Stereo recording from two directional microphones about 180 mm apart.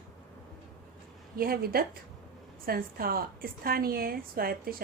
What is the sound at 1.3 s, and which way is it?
A woman's voice, 55° right (ahead or behind).